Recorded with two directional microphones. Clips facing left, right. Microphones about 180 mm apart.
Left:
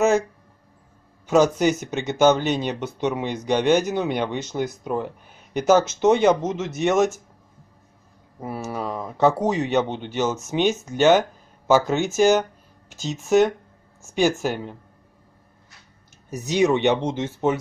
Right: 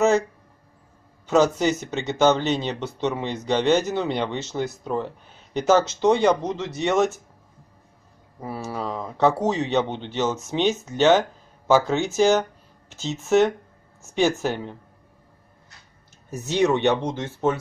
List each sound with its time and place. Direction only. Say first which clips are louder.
1.2 s a sound: left 1 dB; 15° left (ahead or behind)
1.6 s speech: left 2 dB; 15° left (ahead or behind)
8.8 s speech: left 1 dB; 5° left (ahead or behind)
16.3 s speech: left 1 dB; 15° left (ahead or behind)